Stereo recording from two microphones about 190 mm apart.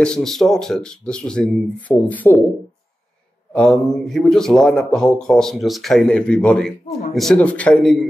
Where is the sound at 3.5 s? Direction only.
5° left (ahead or behind).